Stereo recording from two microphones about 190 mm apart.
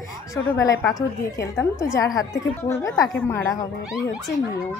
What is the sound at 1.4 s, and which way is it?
A woman's voice, 15° left (ahead or behind).